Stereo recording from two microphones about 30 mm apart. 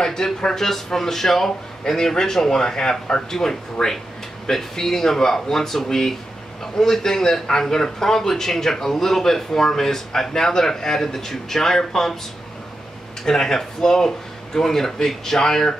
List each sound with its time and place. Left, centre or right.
0.0 s a man's voice: centre
13.2 s a man's voice: centre